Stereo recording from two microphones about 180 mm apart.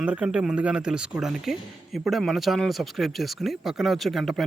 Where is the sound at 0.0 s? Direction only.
5° right (ahead or behind).